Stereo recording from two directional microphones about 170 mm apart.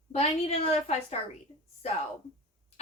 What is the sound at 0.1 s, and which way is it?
Speech, 35° left (ahead or behind).